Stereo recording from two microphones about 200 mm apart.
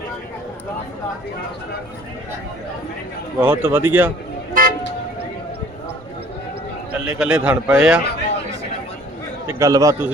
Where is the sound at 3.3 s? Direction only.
10° right (ahead or behind).